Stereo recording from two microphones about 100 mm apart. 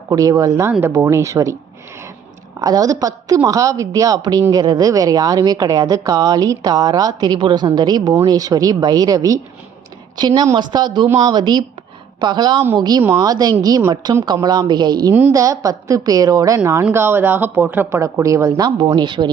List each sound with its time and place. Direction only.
0.1 s a woman's voice: 35° right (ahead or behind)
2.6 s a woman's voice: 40° right (ahead or behind)
16.9 s speech: 25° right (ahead or behind); by 19.3 s 50° right (ahead or behind)